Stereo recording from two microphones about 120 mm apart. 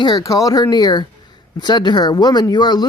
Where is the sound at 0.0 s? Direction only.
35° left (ahead or behind).